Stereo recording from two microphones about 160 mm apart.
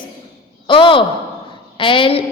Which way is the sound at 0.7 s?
30° left (ahead or behind).